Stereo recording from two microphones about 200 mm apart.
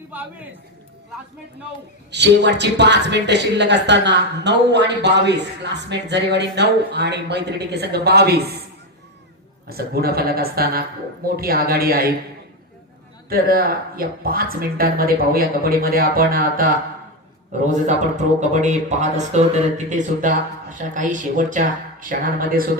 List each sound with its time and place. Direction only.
2.0 s speech: 60° right (ahead or behind)
9.6 s speech: 50° right (ahead or behind)
13.3 s a man's voice: 50° right (ahead or behind)